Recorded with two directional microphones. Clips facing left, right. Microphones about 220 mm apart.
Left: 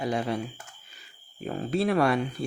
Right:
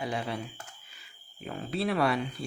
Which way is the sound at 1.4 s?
40° left (ahead or behind).